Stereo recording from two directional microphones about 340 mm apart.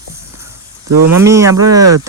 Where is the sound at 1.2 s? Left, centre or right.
Centre.